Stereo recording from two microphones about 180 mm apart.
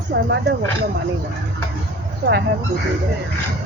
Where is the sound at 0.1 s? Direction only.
70° right (ahead or behind).